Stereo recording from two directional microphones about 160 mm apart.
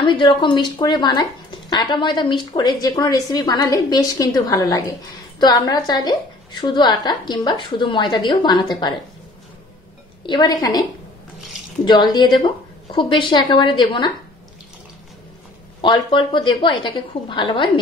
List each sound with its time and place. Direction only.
0.0 s speech: 30° left (ahead or behind)
10.2 s speech: 25° left (ahead or behind)
15.8 s a woman's voice: 30° left (ahead or behind)